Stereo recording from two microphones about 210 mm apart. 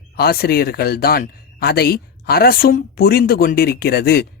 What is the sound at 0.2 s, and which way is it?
Speech, 45° left (ahead or behind).